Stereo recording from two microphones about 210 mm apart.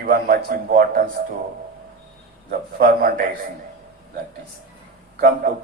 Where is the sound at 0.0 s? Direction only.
45° right (ahead or behind).